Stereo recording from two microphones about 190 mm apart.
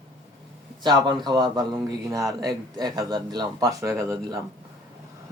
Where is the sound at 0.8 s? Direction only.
20° right (ahead or behind).